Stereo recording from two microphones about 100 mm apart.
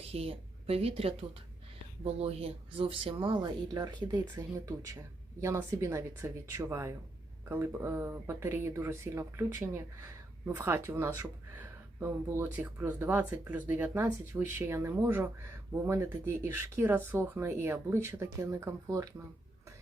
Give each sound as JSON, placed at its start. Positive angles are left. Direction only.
{"t": 0.0, "sound": "speech", "side_deg": -85}
{"t": 2.0, "sound": "speech", "side_deg": -90}
{"t": 3.8, "sound": "speech", "side_deg": -40}
{"t": 5.4, "sound": "speech", "side_deg": -25}